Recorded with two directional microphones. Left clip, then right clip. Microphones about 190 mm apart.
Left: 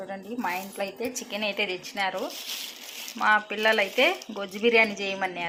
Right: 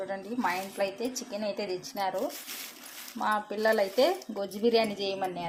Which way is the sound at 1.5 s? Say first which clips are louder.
Left 5 dB; 10° right (ahead or behind).